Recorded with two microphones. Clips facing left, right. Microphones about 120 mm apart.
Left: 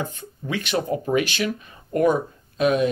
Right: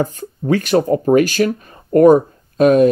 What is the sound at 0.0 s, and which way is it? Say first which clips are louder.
Speech: right 10 dB; 40° right (ahead or behind).